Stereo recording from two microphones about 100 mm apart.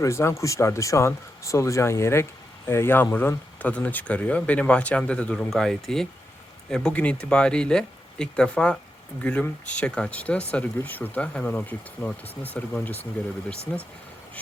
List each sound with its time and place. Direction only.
0.0 s speech: 30° left (ahead or behind)